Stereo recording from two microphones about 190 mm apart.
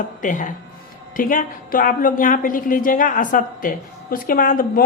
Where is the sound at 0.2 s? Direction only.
40° left (ahead or behind).